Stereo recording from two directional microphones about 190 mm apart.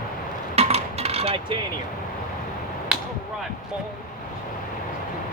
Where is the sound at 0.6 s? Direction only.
35° right (ahead or behind).